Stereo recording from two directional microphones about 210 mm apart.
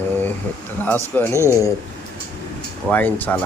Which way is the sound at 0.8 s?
10° left (ahead or behind).